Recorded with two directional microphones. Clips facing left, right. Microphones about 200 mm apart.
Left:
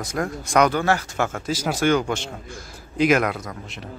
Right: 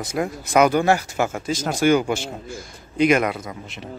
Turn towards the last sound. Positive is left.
turn(degrees=0)  # may be behind; listen again after turning